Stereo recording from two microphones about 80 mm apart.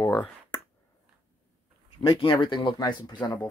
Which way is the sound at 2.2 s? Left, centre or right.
Left.